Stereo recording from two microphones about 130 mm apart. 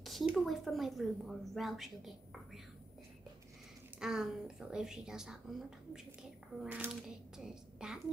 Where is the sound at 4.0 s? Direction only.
5° right (ahead or behind).